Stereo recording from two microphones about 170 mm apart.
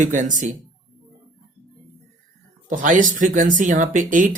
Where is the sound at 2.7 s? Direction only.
50° right (ahead or behind).